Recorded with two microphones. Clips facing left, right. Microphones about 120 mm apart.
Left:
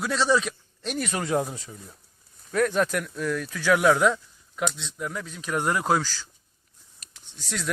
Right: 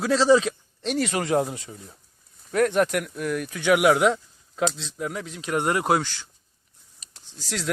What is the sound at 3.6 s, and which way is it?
Speech, 20° right (ahead or behind).